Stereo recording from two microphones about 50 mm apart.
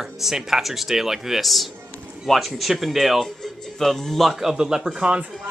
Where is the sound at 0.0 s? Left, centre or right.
Centre.